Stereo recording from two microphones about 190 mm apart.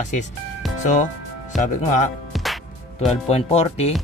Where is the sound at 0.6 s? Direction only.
Centre (ahead or behind).